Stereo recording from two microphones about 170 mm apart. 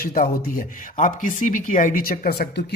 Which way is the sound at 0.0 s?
55° left (ahead or behind).